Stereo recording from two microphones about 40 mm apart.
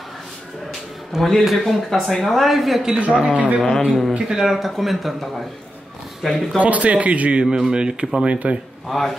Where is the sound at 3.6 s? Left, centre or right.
Centre.